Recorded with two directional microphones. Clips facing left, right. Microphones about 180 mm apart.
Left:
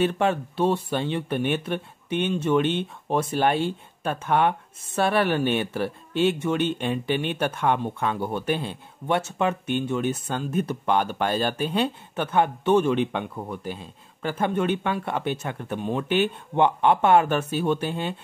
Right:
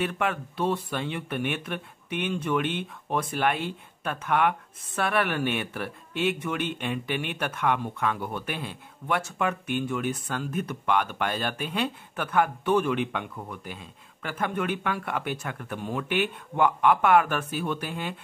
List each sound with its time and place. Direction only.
0.0 s speech: 30° left (ahead or behind)